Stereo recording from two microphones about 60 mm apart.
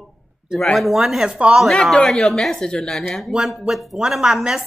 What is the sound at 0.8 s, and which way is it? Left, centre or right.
Speech, centre.